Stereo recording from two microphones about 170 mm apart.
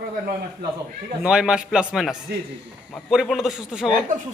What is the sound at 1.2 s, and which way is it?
A man's voice, 5° right (ahead or behind).